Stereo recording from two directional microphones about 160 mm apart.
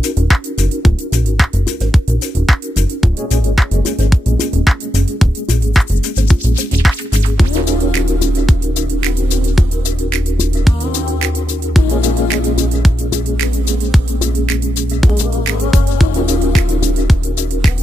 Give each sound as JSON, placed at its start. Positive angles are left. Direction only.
{"t": 0.0, "sound": "music", "side_deg": 0}
{"t": 4.6, "sound": "music", "side_deg": 0}